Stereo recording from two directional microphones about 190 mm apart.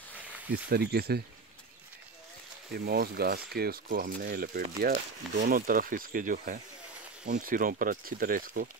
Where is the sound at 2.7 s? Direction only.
55° right (ahead or behind).